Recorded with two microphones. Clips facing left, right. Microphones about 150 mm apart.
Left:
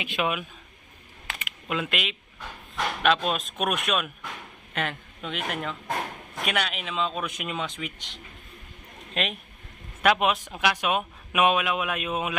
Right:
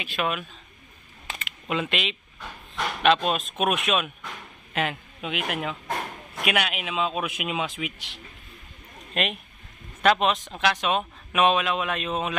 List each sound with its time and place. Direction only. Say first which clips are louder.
0.0 s speech: even; 20° left (ahead or behind)
1.7 s speech: right 2 dB; centre (ahead or behind)
10.0 s speech: right 1 dB; 10° left (ahead or behind)